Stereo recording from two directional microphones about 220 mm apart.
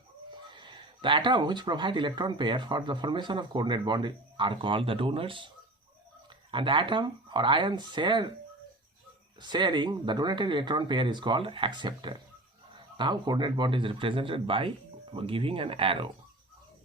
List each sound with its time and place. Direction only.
0.5 s speech: 20° right (ahead or behind)
6.5 s speech: 20° right (ahead or behind)
9.4 s speech: 20° right (ahead or behind)